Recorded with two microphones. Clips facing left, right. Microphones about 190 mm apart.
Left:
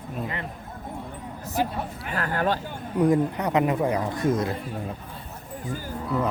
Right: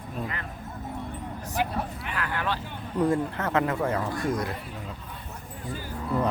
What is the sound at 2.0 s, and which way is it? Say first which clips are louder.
Speech: left 8 dB; 40° left (ahead or behind).